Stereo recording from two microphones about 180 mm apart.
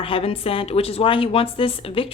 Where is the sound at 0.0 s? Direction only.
30° left (ahead or behind).